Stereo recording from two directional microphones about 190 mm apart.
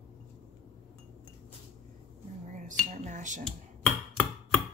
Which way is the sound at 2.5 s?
40° right (ahead or behind).